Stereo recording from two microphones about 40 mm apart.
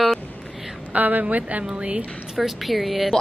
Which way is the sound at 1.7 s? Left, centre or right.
Right.